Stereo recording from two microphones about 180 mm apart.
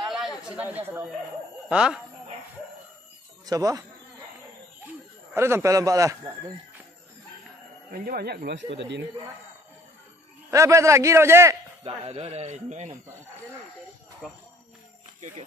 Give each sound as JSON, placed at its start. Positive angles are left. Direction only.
{"t": 0.0, "sound": "chatter", "side_deg": 0}
{"t": 0.4, "sound": "speech", "side_deg": -5}
{"t": 3.4, "sound": "speech", "side_deg": -20}
{"t": 5.3, "sound": "a man's voice", "side_deg": -15}
{"t": 7.9, "sound": "speech", "side_deg": -60}
{"t": 8.7, "sound": "speech", "side_deg": -75}
{"t": 10.5, "sound": "a man's voice", "side_deg": -15}
{"t": 11.8, "sound": "speech", "side_deg": -35}
{"t": 14.2, "sound": "speech", "side_deg": 0}